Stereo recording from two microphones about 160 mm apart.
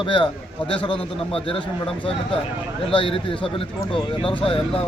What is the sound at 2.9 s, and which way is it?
Speech, 30° left (ahead or behind).